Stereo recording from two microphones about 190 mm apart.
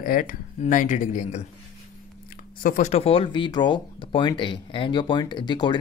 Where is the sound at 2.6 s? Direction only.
40° left (ahead or behind).